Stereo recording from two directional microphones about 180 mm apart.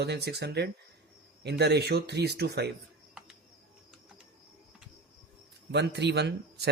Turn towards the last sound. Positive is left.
turn(degrees=-70)  # may be behind; listen again after turning